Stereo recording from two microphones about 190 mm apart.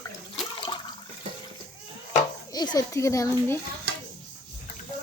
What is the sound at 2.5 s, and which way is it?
A child's voice, 20° left (ahead or behind).